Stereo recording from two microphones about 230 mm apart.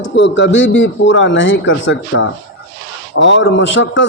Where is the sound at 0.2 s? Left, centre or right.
Left.